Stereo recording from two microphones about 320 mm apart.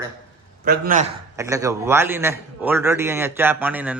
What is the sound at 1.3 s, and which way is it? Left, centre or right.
A man's voice, centre.